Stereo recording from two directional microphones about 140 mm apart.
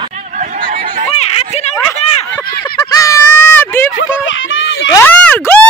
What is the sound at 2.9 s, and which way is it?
Honk, 25° left (ahead or behind).